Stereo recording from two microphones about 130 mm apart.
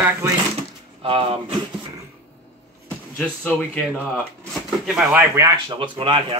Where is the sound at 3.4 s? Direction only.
10° left (ahead or behind).